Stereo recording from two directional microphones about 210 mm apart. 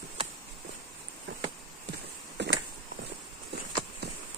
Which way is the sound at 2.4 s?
55° right (ahead or behind).